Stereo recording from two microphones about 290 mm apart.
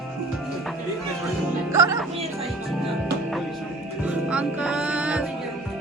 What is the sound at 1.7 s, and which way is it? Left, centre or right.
Speech, centre.